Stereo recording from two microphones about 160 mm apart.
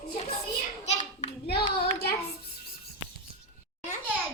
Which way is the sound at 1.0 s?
40° left (ahead or behind).